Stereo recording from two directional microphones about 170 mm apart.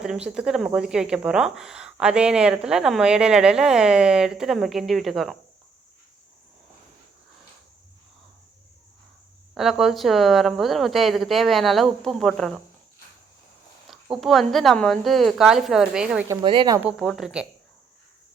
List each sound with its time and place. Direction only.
0.0 s speech: 5° right (ahead or behind)
9.6 s speech: centre (ahead or behind)
13.9 s speech: centre (ahead or behind)
16.4 s speech: 30° right (ahead or behind)
17.0 s speech: centre (ahead or behind)